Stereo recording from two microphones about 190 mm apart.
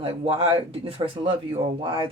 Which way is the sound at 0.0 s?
30° right (ahead or behind).